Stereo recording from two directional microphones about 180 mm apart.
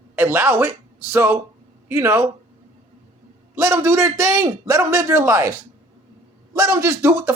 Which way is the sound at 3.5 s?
15° right (ahead or behind).